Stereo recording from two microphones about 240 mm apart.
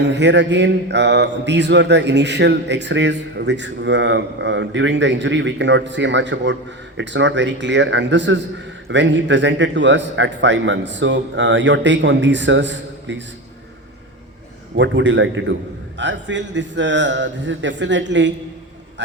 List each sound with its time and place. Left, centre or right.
0.0 s mantra: right
14.8 s mantra: right